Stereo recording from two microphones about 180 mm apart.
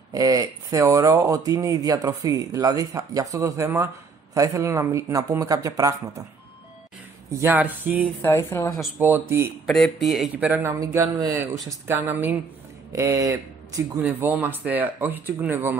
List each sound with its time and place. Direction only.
0.1 s speech: 20° right (ahead or behind)
7.2 s speech: 15° right (ahead or behind)
8.2 s a woman's voice: 10° left (ahead or behind)
9.0 s speech: 15° right (ahead or behind)
9.7 s speech: centre (ahead or behind)